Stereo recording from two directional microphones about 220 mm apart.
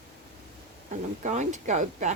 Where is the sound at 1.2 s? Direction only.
35° right (ahead or behind).